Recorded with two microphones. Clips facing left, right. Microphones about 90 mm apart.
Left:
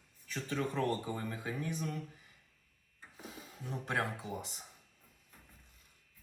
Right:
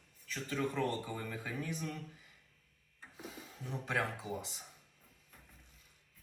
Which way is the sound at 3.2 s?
5° left (ahead or behind).